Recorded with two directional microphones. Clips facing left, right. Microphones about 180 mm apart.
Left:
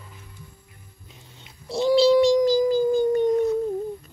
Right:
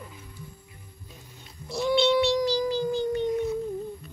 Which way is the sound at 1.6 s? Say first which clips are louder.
Left 6 dB; 35° left (ahead or behind).